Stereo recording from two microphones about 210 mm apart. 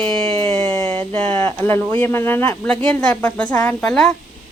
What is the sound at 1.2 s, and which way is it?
A woman's voice, 10° left (ahead or behind).